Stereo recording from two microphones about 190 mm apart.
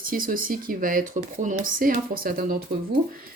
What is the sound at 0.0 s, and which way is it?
Speech, 45° right (ahead or behind).